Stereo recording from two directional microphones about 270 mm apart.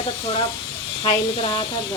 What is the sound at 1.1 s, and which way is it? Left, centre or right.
Speech, centre.